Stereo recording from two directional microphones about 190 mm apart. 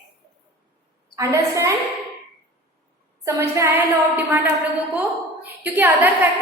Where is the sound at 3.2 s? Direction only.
15° right (ahead or behind).